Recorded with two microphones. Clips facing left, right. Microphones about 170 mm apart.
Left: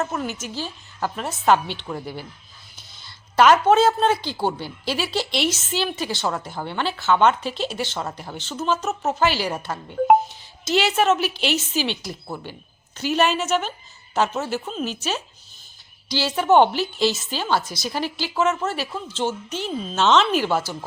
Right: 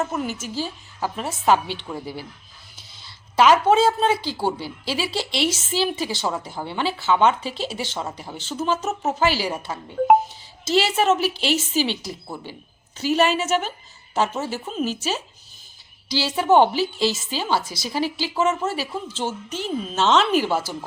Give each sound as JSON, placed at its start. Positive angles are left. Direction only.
{"t": 0.0, "sound": "a woman's voice", "side_deg": -5}
{"t": 11.4, "sound": "a woman's voice", "side_deg": -40}
{"t": 12.0, "sound": "a woman's voice", "side_deg": -5}